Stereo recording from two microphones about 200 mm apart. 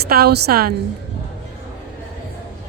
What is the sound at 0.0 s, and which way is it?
Speech, 50° right (ahead or behind).